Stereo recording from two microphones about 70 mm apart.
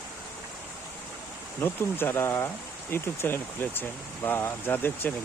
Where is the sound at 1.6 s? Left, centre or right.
Left.